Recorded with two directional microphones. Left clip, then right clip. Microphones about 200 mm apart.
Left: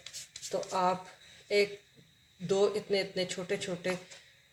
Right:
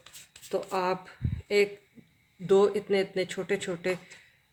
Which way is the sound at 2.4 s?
45° right (ahead or behind).